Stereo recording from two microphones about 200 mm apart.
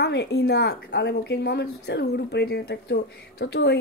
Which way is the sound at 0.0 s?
55° left (ahead or behind).